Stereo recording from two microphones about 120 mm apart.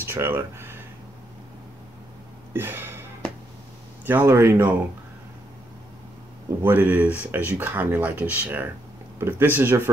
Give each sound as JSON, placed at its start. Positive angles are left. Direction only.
{"t": 0.0, "sound": "speech", "side_deg": -20}
{"t": 2.5, "sound": "a sound", "side_deg": -15}
{"t": 4.0, "sound": "speech", "side_deg": -15}
{"t": 6.6, "sound": "speech", "side_deg": -15}